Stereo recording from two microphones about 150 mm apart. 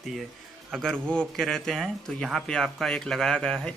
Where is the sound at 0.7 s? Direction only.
5° left (ahead or behind).